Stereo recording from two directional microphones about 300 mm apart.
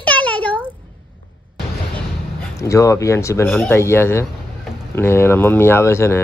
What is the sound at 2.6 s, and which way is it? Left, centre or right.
Speech, centre.